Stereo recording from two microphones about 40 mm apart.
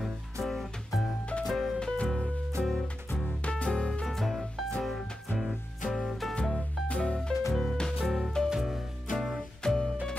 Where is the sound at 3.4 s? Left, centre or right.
Left.